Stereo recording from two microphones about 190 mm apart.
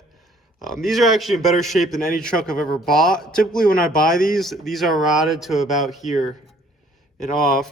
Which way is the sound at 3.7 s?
50° left (ahead or behind).